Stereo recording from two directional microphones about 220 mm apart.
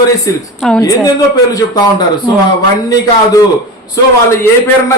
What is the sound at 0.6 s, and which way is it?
Speech, centre (ahead or behind).